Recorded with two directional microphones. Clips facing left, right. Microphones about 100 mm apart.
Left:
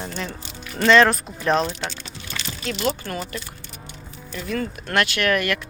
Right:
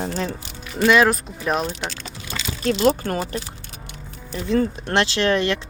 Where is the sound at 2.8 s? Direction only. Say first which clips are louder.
Right 6 dB; 40° right (ahead or behind).